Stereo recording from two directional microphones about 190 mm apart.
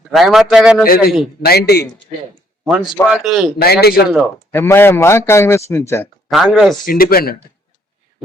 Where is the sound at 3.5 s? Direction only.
55° left (ahead or behind).